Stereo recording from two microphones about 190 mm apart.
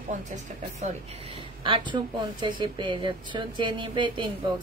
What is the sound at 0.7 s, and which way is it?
A woman's voice, 35° right (ahead or behind).